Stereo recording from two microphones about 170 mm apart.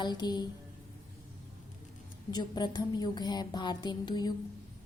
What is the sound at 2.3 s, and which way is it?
Speech, 25° left (ahead or behind).